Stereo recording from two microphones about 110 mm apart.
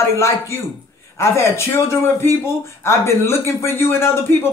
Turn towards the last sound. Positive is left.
turn(degrees=20)  # may be behind; listen again after turning